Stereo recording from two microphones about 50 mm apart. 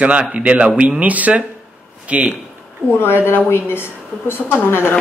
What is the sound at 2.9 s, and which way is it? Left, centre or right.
A woman's voice, left.